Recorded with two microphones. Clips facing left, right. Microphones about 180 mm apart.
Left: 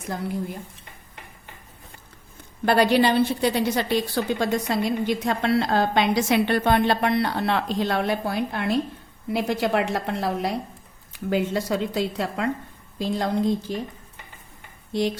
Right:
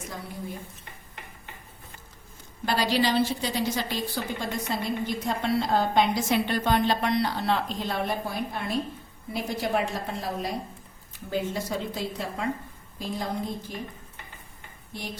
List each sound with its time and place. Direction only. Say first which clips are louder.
2.6 s a woman's voice: left 6 dB; 60° left (ahead or behind); by 13.8 s 90° left
14.9 s speech: left 13 dB; 90° left